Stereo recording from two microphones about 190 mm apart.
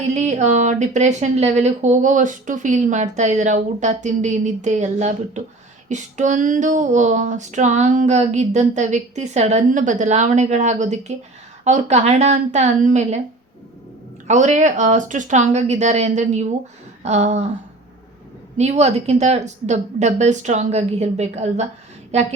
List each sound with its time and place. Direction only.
0.1 s speech: 35° right (ahead or behind)
14.3 s speech: 40° right (ahead or behind)
18.5 s speech: 35° right (ahead or behind)